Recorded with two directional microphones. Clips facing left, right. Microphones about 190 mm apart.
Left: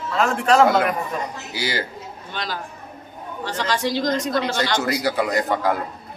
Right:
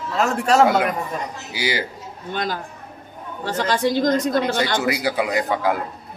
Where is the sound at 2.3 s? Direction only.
50° right (ahead or behind).